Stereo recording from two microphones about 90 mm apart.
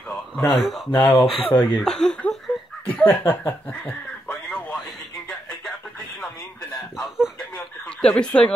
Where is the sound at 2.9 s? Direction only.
20° left (ahead or behind).